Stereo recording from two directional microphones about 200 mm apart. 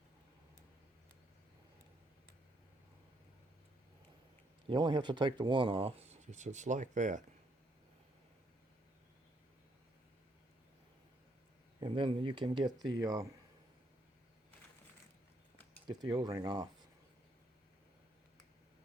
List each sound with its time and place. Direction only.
4.7 s speech: 20° right (ahead or behind); by 7.3 s 40° right (ahead or behind)
11.8 s speech: 25° right (ahead or behind)
15.9 s speech: 20° right (ahead or behind)